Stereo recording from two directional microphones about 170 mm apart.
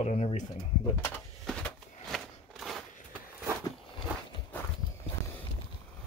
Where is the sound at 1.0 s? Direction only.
5° left (ahead or behind).